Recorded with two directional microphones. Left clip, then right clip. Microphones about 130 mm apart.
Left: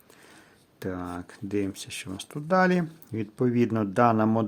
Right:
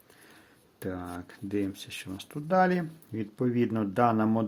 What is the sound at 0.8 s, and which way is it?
Speech, 40° left (ahead or behind).